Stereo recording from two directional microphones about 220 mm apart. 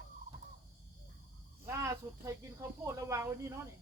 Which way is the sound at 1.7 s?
15° right (ahead or behind).